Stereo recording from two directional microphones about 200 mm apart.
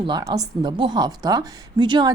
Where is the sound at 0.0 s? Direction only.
20° right (ahead or behind).